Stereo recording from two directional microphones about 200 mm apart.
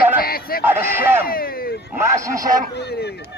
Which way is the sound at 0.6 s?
10° right (ahead or behind).